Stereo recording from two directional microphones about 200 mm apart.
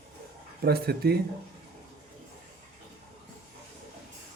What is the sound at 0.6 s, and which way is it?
Speech, 50° right (ahead or behind).